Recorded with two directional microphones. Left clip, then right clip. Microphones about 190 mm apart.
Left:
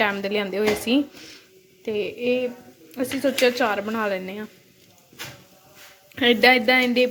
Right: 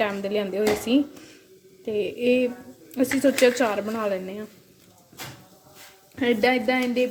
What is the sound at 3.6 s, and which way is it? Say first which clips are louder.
Speech: left 2 dB; 5° right (ahead or behind).